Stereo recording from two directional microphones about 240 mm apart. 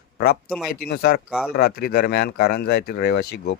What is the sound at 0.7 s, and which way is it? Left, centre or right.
Speech, left.